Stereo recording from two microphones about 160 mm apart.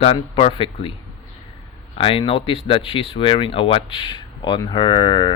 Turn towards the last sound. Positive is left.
turn(degrees=30)  # may be behind; listen again after turning